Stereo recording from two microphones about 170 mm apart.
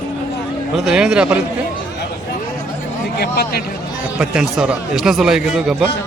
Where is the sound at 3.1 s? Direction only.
65° left (ahead or behind).